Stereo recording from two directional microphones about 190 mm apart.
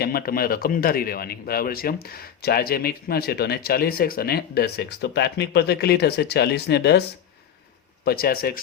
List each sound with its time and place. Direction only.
0.0 s speech: 50° left (ahead or behind)
8.0 s speech: 55° left (ahead or behind)